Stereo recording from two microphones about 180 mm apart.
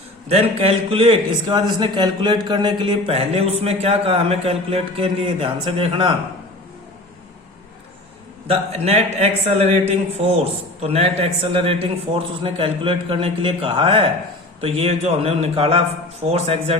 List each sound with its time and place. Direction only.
0.3 s a man's voice: 35° right (ahead or behind)
8.4 s a man's voice: 35° right (ahead or behind)